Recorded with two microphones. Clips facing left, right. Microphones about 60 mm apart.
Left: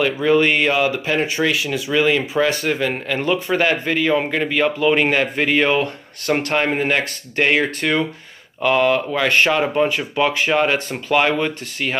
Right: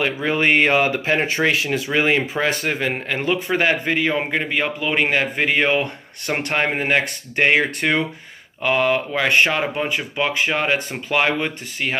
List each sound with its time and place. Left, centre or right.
0.0 s a man's voice: right